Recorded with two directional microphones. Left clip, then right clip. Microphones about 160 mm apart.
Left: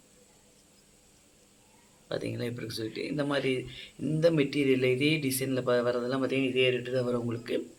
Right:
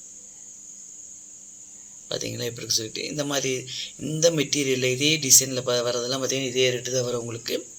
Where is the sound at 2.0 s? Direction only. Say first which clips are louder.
Right 4 dB; 25° right (ahead or behind).